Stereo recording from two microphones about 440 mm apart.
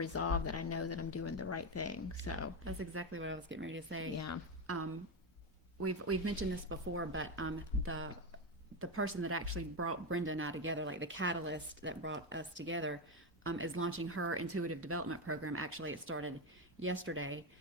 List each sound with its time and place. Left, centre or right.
0.0 s a woman's voice: left
2.6 s speech: right